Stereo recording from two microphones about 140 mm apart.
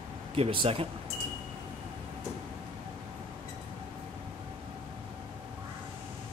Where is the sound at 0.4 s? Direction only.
40° right (ahead or behind).